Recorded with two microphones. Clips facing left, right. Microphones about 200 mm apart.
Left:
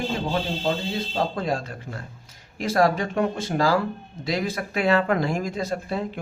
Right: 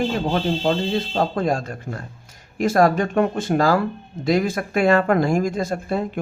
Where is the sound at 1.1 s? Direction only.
50° right (ahead or behind).